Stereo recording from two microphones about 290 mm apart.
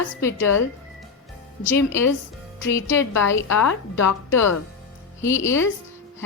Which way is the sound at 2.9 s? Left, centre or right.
Centre.